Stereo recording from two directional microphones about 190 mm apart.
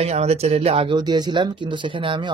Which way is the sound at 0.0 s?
35° right (ahead or behind).